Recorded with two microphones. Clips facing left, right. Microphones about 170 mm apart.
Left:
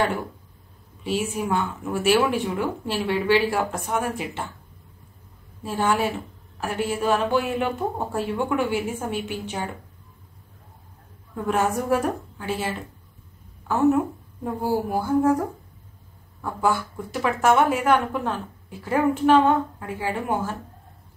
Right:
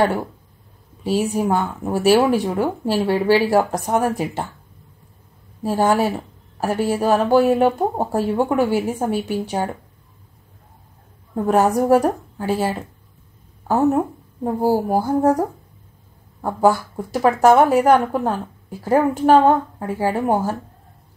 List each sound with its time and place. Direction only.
1.0 s speech: 40° right (ahead or behind)
5.6 s speech: 40° right (ahead or behind)
11.3 s speech: 40° right (ahead or behind)
16.3 s speech: 40° right (ahead or behind)